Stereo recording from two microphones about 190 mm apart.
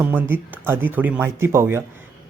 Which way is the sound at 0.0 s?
10° right (ahead or behind).